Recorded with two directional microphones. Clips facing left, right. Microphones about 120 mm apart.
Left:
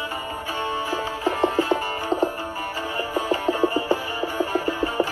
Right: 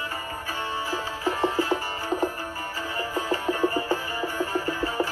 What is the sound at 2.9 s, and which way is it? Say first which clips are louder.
Music: left 3 dB; 15° left (ahead or behind).